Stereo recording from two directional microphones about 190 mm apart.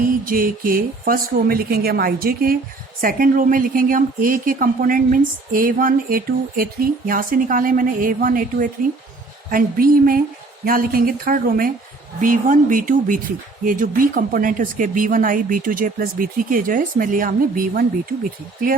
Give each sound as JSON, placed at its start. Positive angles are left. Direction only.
{"t": 0.3, "sound": "speech", "side_deg": -50}
{"t": 9.5, "sound": "speech", "side_deg": -45}